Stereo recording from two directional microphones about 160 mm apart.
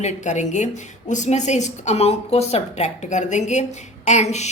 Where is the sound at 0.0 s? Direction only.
50° left (ahead or behind).